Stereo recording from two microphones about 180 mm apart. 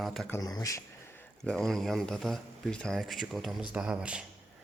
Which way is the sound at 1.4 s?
5° left (ahead or behind).